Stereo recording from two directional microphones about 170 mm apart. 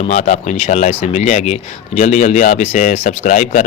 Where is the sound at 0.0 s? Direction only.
40° left (ahead or behind).